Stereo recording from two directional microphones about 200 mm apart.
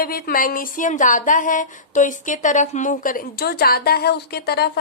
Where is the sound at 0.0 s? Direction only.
45° left (ahead or behind).